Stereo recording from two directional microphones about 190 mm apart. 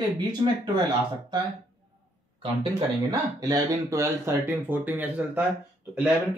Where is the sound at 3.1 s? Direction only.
20° right (ahead or behind).